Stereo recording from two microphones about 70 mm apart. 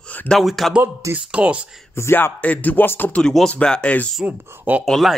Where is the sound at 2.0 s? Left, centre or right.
Left.